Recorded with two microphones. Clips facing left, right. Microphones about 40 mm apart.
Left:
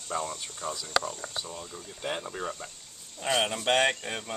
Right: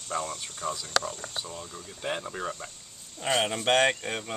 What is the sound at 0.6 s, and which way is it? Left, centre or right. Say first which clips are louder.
Speech: right 3 dB; left.